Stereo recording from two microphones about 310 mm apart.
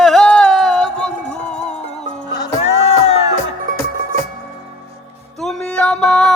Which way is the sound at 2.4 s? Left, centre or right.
Centre.